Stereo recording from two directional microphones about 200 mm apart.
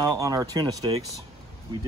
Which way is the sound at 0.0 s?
20° right (ahead or behind).